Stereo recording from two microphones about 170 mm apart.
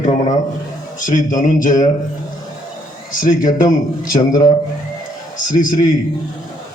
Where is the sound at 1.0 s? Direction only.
50° left (ahead or behind).